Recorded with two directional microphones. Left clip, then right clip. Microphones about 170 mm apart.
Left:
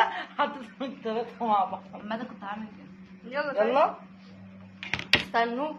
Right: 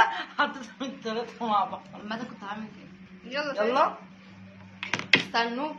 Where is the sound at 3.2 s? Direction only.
25° right (ahead or behind).